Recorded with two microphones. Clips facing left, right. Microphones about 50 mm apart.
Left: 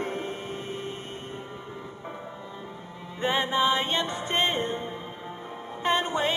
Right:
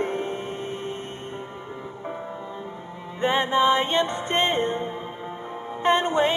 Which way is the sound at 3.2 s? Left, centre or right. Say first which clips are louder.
Right 4 dB; right.